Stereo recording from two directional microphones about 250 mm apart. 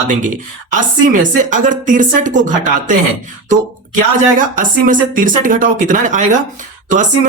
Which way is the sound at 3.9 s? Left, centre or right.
Right.